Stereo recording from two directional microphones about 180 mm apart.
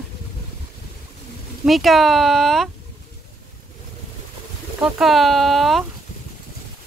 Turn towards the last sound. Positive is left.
turn(degrees=0)  # may be behind; listen again after turning